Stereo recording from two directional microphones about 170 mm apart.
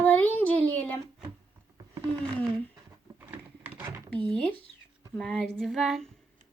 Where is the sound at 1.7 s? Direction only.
25° right (ahead or behind).